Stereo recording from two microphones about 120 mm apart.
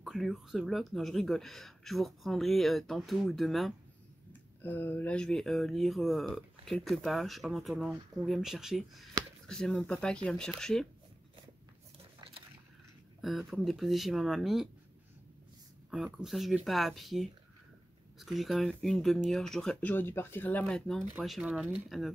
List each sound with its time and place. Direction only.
0.0 s speech: 5° right (ahead or behind)
4.3 s speech: 15° left (ahead or behind)
13.2 s speech: centre (ahead or behind)
15.9 s speech: 5° right (ahead or behind)
19.9 s speech: 15° left (ahead or behind); by 22.1 s centre (ahead or behind)